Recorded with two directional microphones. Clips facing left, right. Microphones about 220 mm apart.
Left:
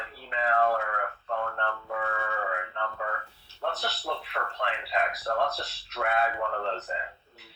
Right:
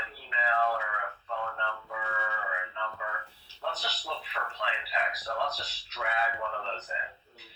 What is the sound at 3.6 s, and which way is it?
Speech, 50° left (ahead or behind).